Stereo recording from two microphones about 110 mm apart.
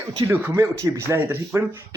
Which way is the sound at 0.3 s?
20° right (ahead or behind).